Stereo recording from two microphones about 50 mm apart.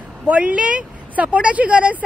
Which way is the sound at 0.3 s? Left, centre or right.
Right.